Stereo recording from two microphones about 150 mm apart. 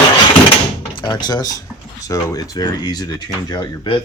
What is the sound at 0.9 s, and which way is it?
Speech, 30° left (ahead or behind).